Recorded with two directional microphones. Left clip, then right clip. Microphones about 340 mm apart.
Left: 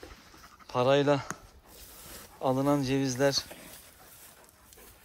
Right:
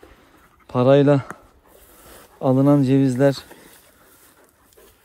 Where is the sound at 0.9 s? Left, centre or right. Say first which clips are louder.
Right 10 dB; centre.